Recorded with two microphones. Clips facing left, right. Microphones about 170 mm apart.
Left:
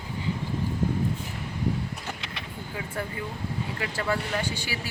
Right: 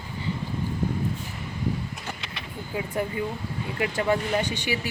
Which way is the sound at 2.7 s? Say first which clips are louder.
Right 6 dB; 15° right (ahead or behind).